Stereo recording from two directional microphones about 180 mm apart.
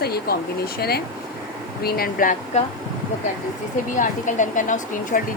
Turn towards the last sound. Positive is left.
turn(degrees=45)  # may be behind; listen again after turning